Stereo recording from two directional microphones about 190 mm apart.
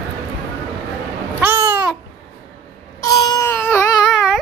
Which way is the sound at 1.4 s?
10° right (ahead or behind).